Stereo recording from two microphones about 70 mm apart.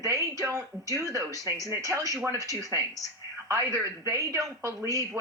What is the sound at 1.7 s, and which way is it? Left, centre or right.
Speech, right.